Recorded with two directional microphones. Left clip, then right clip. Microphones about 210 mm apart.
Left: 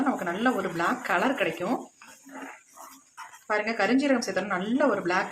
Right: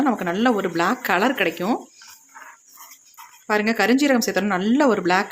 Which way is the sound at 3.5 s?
55° right (ahead or behind).